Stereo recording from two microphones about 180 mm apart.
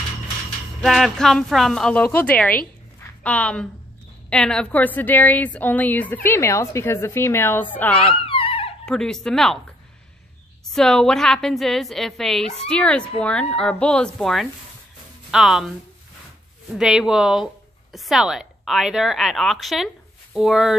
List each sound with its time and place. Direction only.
0.7 s a woman's voice: centre (ahead or behind)
3.0 s a sound: 5° left (ahead or behind)
4.3 s a woman's voice: 5° left (ahead or behind)
8.3 s a sound: 30° left (ahead or behind)
8.8 s a woman's voice: 5° left (ahead or behind)
10.6 s a woman's voice: 5° left (ahead or behind)
16.7 s a woman's voice: 5° right (ahead or behind)